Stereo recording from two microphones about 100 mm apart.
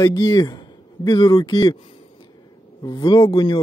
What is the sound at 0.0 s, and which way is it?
Speech, 35° left (ahead or behind).